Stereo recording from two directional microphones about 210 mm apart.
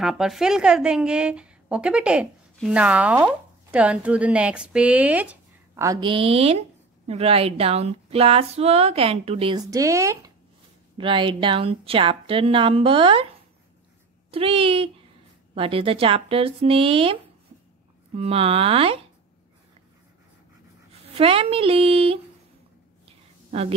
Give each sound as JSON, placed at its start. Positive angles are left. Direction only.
{"t": 0.0, "sound": "a woman's voice", "side_deg": 0}
{"t": 14.3, "sound": "speech", "side_deg": -25}
{"t": 21.1, "sound": "speech", "side_deg": -25}
{"t": 23.0, "sound": "a sound", "side_deg": -30}